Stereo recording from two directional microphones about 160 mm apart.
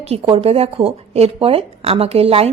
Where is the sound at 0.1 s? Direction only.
35° right (ahead or behind).